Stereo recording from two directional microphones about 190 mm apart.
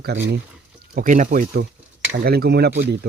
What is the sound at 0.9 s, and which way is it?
Speech, 40° right (ahead or behind).